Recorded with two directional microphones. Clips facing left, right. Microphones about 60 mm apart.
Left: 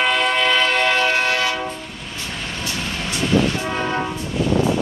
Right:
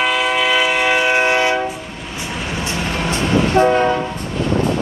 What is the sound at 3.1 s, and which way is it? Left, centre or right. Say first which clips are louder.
Train: right 1 dB; right.